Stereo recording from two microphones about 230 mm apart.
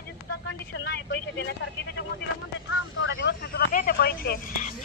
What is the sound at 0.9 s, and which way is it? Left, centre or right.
Speech, left.